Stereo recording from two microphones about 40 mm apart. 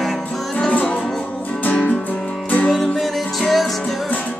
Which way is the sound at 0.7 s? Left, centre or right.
Left.